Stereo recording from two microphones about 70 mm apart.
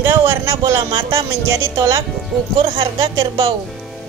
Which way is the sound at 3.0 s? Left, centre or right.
Right.